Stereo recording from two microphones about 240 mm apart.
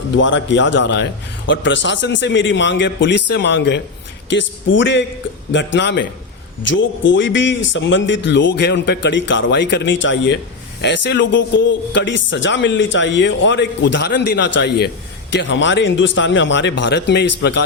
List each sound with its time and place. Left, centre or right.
0.2 s speech: left